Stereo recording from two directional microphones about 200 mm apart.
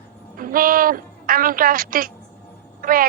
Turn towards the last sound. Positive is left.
turn(degrees=-45)  # may be behind; listen again after turning